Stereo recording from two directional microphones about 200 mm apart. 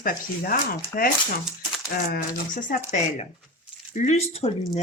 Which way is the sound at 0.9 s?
45° left (ahead or behind).